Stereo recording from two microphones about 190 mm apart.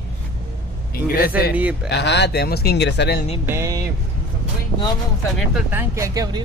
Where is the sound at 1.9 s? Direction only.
65° left (ahead or behind).